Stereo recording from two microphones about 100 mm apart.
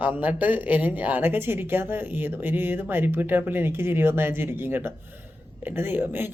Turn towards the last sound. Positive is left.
turn(degrees=-20)  # may be behind; listen again after turning